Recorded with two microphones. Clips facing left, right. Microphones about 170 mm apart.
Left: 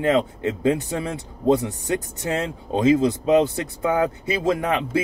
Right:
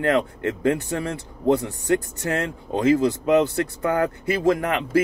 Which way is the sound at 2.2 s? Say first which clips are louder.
Even; 20° left (ahead or behind).